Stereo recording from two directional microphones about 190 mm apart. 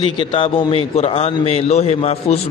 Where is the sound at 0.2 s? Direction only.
30° left (ahead or behind).